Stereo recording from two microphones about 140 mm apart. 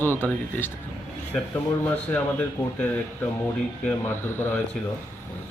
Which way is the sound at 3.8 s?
15° left (ahead or behind).